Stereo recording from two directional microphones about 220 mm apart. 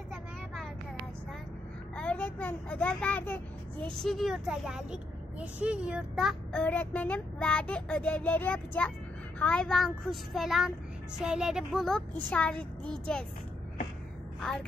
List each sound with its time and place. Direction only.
2.0 s a child's voice: 5° left (ahead or behind)